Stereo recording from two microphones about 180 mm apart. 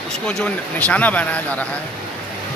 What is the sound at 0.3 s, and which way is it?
A man's voice, 5° left (ahead or behind).